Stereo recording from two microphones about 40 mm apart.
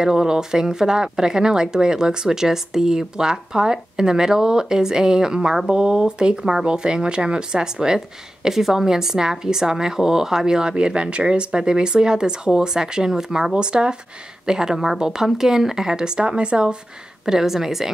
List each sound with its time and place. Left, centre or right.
0.0 s speech: centre
17.3 s speech: centre